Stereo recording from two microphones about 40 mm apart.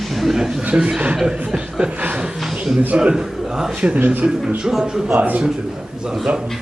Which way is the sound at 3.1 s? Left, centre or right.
Centre.